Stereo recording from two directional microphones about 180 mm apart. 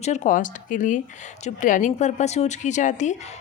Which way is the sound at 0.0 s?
40° left (ahead or behind).